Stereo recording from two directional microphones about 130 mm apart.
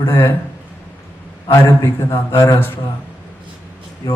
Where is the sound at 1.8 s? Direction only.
25° left (ahead or behind).